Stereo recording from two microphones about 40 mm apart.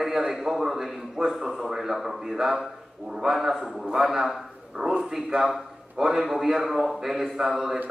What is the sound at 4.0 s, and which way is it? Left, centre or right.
A man's voice, centre.